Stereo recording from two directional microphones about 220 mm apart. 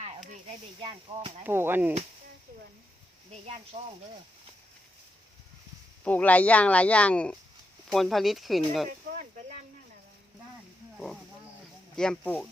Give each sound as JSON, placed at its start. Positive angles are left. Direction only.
{"t": 0.8, "sound": "speech", "side_deg": -20}
{"t": 1.5, "sound": "speech", "side_deg": -10}
{"t": 3.4, "sound": "speech", "side_deg": -30}
{"t": 6.1, "sound": "speech", "side_deg": 5}
{"t": 11.9, "sound": "speech", "side_deg": 5}